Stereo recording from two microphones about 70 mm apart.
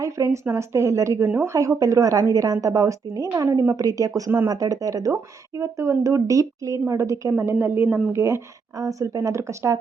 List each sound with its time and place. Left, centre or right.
0.0 s a woman's voice: right
8.1 s speech: right
8.8 s speech: right